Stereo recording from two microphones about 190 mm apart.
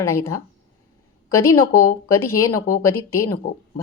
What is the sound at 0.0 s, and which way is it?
Speech, 15° left (ahead or behind).